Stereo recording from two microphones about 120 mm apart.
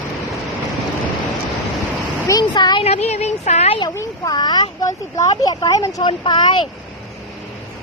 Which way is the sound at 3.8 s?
30° left (ahead or behind).